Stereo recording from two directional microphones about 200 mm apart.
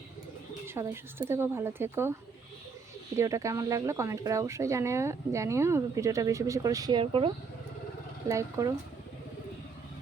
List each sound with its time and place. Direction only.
0.7 s speech: 10° right (ahead or behind)
3.2 s speech: 15° right (ahead or behind)
8.3 s speech: 15° right (ahead or behind)